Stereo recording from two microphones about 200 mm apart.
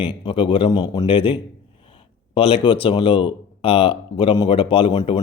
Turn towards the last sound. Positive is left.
turn(degrees=20)  # may be behind; listen again after turning